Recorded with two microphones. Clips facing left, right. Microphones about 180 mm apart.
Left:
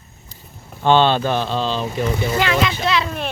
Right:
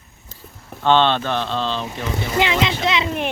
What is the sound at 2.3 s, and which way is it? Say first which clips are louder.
Speech: right 3 dB; 20° right (ahead or behind).